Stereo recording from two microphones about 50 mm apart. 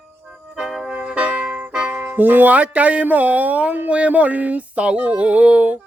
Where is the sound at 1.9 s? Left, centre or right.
Right.